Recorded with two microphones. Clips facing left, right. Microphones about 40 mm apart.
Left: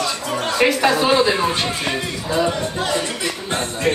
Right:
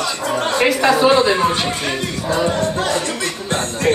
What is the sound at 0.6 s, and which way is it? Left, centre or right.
Speech, centre.